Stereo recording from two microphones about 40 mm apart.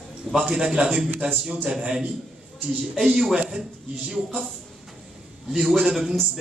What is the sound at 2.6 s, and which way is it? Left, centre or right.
Speech, centre.